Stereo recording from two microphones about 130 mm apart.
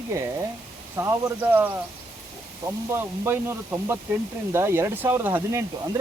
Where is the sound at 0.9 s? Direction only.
25° right (ahead or behind).